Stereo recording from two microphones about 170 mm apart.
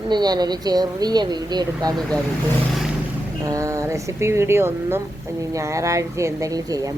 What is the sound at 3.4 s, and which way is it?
Speech, 20° right (ahead or behind).